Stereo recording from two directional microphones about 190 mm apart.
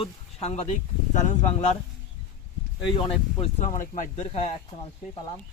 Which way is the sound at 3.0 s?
35° left (ahead or behind).